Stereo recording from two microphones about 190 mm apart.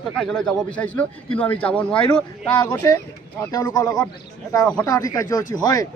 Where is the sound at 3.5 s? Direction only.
20° left (ahead or behind).